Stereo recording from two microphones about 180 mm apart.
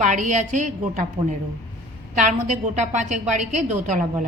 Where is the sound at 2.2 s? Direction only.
45° right (ahead or behind).